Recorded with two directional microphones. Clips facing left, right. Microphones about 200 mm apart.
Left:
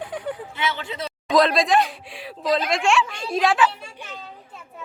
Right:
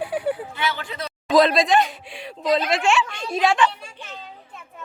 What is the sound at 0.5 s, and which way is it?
Speech, 20° left (ahead or behind).